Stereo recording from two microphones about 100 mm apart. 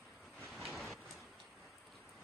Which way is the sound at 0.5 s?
Centre (ahead or behind).